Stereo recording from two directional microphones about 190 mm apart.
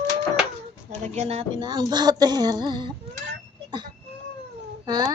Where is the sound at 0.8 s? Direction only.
40° right (ahead or behind).